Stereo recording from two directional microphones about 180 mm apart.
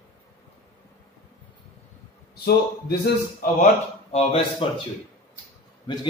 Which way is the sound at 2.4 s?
60° left (ahead or behind).